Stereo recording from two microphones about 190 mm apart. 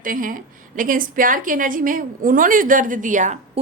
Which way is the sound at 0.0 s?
45° right (ahead or behind).